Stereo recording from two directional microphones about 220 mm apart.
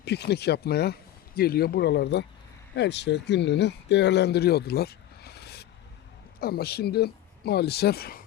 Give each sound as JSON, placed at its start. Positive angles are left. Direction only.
{"t": 0.0, "sound": "speech", "side_deg": 50}